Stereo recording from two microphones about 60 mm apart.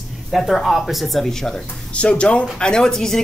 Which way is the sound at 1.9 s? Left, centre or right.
Centre.